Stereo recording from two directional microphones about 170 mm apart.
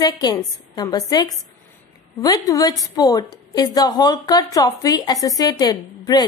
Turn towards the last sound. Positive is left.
turn(degrees=25)  # may be behind; listen again after turning